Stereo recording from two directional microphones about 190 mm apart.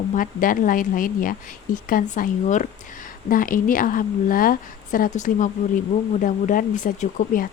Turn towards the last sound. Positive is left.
turn(degrees=45)  # may be behind; listen again after turning